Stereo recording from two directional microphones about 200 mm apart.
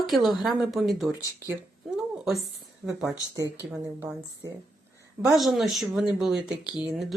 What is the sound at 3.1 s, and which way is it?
Speech, 15° right (ahead or behind).